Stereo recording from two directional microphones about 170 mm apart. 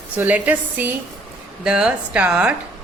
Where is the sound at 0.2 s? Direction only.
10° right (ahead or behind).